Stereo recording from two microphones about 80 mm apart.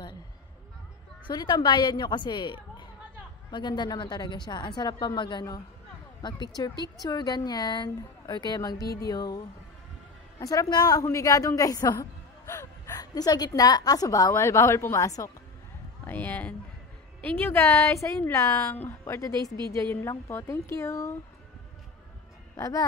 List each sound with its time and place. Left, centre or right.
1.3 s a woman's voice: left
8.5 s speech: left
10.4 s a woman's voice: left
11.1 s a woman's voice: left
12.4 s gasp: left
13.0 s a woman's voice: left
16.1 s a woman's voice: left
22.6 s a woman's voice: left